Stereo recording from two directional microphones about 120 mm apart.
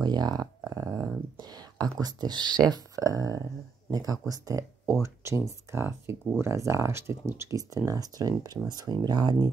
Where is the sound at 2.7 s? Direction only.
30° right (ahead or behind).